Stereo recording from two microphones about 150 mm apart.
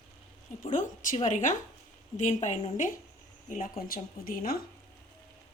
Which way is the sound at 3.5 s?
65° left (ahead or behind).